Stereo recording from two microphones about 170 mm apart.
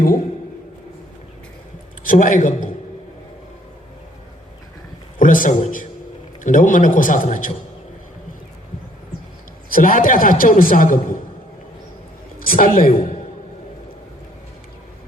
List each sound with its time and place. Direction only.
2.0 s a man's voice: 50° left (ahead or behind)
5.2 s a man's voice: 50° left (ahead or behind)
9.7 s a man's voice: 55° left (ahead or behind)
12.4 s a man's voice: 55° left (ahead or behind)